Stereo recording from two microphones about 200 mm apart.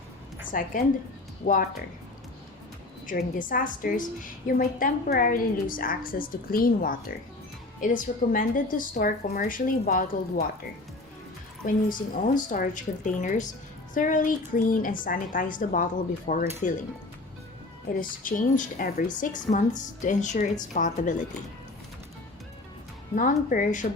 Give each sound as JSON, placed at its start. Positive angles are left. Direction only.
{"t": 0.4, "sound": "a woman's voice", "side_deg": 45}
{"t": 1.4, "sound": "speech", "side_deg": 55}
{"t": 3.1, "sound": "a woman's voice", "side_deg": 45}
{"t": 11.6, "sound": "a woman's voice", "side_deg": 45}
{"t": 17.9, "sound": "a woman's voice", "side_deg": 45}
{"t": 23.1, "sound": "a woman's voice", "side_deg": 40}